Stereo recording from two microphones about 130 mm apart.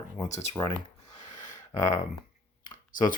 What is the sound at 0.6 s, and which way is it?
Speech, 25° left (ahead or behind).